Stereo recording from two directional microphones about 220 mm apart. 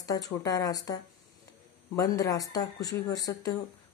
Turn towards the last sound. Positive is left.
turn(degrees=15)  # may be behind; listen again after turning